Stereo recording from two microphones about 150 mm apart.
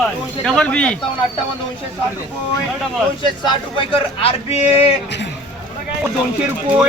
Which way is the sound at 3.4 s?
35° left (ahead or behind).